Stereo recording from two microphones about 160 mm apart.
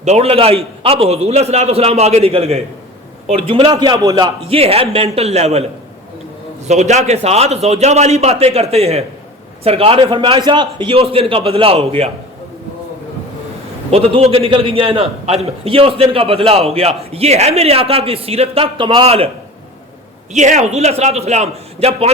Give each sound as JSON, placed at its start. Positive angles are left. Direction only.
{"t": 0.0, "sound": "a man's voice", "side_deg": -40}
{"t": 6.7, "sound": "a man's voice", "side_deg": -45}
{"t": 13.9, "sound": "a man's voice", "side_deg": -40}
{"t": 20.3, "sound": "a man's voice", "side_deg": -50}